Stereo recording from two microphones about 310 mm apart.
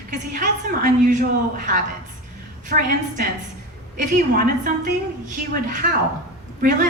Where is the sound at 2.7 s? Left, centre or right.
Right.